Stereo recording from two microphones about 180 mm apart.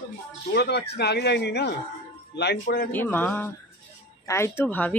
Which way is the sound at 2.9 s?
10° left (ahead or behind).